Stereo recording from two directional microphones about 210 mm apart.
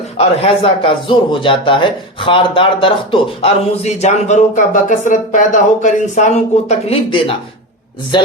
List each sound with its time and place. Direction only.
0.2 s a man's voice: 25° left (ahead or behind)